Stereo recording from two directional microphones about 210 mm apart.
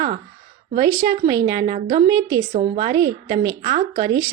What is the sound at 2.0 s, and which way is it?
Speech, 15° right (ahead or behind).